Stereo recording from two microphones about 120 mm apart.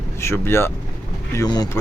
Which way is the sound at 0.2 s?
20° left (ahead or behind).